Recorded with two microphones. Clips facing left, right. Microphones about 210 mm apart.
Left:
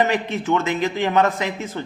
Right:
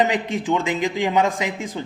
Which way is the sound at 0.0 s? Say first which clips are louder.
Even; 15° right (ahead or behind).